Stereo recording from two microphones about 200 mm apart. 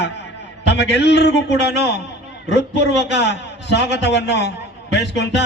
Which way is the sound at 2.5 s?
60° left (ahead or behind).